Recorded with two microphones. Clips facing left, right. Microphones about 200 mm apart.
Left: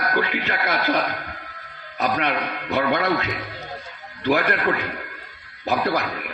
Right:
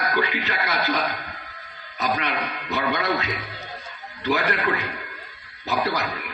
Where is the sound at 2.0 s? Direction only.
60° left (ahead or behind).